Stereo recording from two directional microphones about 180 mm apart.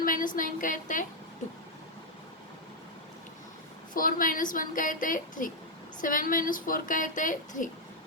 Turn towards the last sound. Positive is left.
turn(degrees=45)  # may be behind; listen again after turning